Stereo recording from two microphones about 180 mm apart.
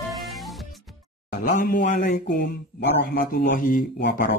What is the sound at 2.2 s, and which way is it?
Speech, 65° left (ahead or behind).